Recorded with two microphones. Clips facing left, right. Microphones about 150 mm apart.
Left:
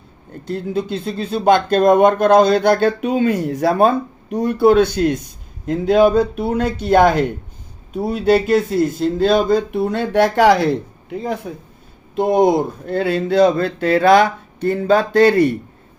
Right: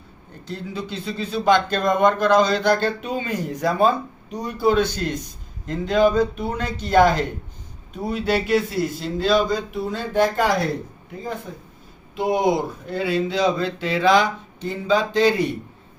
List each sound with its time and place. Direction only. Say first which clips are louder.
0.4 s speech: left 9 dB; 50° left (ahead or behind); by 11.3 s 80° left
12.1 s speech: left 6 dB; 50° left (ahead or behind)